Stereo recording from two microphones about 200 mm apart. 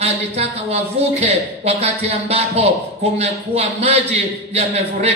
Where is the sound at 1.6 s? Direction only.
30° right (ahead or behind).